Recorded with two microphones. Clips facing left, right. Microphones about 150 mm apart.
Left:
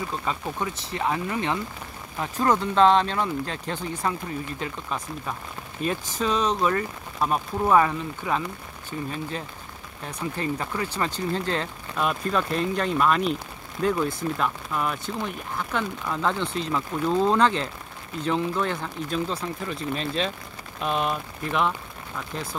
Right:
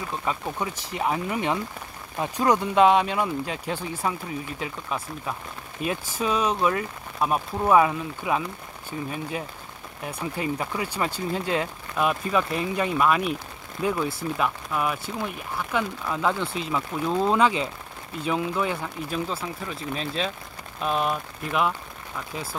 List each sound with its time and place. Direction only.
0.2 s speech: 10° right (ahead or behind)
20.8 s speech: centre (ahead or behind)